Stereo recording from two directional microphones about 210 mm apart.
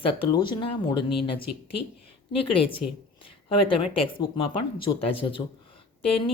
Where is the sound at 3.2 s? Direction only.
25° left (ahead or behind).